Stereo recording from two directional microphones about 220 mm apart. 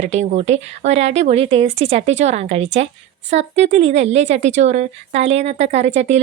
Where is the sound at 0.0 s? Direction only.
30° right (ahead or behind).